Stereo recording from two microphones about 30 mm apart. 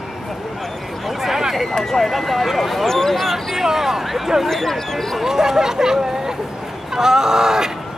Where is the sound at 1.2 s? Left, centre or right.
Centre.